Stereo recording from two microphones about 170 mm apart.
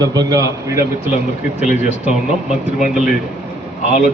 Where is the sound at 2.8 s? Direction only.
5° right (ahead or behind).